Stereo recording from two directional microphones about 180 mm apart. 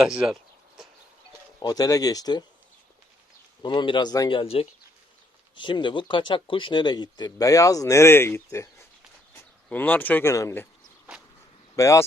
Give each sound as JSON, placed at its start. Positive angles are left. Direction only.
{"t": 0.0, "sound": "speech", "side_deg": -5}
{"t": 1.5, "sound": "speech", "side_deg": 20}
{"t": 3.6, "sound": "speech", "side_deg": 25}
{"t": 11.8, "sound": "speech", "side_deg": 15}